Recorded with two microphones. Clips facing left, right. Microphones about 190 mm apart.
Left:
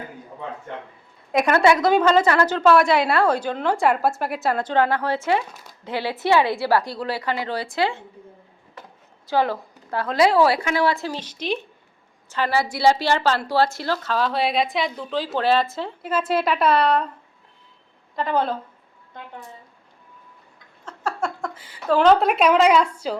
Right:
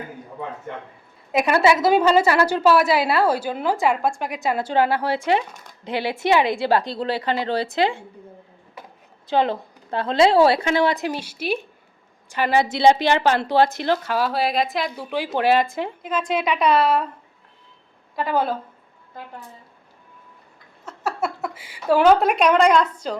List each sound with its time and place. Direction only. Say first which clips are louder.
1.3 s a woman's voice: even; 5° right (ahead or behind)
9.3 s a woman's voice: right 1 dB; 20° right (ahead or behind); by 15.0 s centre (ahead or behind)
15.1 s a woman's voice: right 2 dB; 15° right (ahead or behind)
16.0 s a woman's voice: left 2 dB; 5° left (ahead or behind)
18.2 s a woman's voice: even; 5° right (ahead or behind)
20.8 s a woman's voice: right 1 dB; 10° right (ahead or behind); by 23.1 s 5° left (ahead or behind)